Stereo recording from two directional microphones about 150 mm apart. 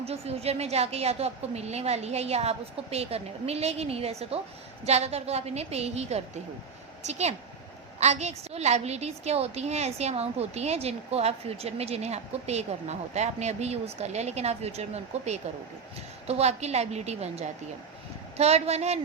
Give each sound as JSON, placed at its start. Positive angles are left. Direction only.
{"t": 0.0, "sound": "a woman's voice", "side_deg": -45}